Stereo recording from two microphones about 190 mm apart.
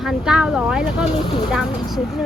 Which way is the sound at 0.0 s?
5° right (ahead or behind).